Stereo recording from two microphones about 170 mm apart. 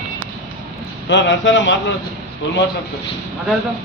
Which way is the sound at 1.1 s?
90° left.